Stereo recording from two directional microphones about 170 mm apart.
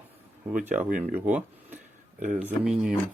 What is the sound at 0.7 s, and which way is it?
Speech, 50° right (ahead or behind).